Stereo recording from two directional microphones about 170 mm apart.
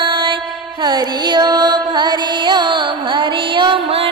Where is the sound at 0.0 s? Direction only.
30° right (ahead or behind).